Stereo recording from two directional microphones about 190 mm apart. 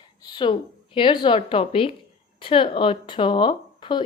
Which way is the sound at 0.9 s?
25° left (ahead or behind).